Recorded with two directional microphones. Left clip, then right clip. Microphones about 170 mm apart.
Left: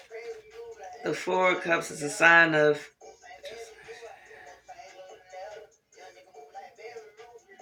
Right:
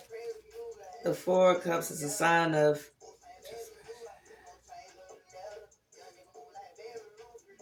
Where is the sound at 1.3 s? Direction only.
25° right (ahead or behind).